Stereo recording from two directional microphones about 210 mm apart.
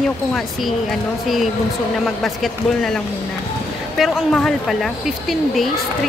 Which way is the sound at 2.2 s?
Centre (ahead or behind).